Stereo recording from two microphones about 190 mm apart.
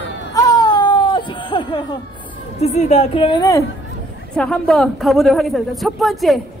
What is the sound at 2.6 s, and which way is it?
A woman's voice, 35° left (ahead or behind).